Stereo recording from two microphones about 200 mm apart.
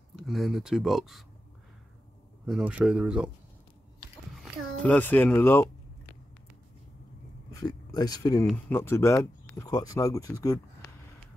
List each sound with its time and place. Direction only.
0.3 s speech: centre (ahead or behind)
2.4 s speech: 5° right (ahead or behind)
4.4 s speech: 5° left (ahead or behind)
7.5 s speech: 20° left (ahead or behind)